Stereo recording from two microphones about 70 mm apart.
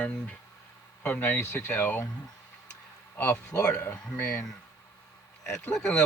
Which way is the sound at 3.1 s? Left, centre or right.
Left.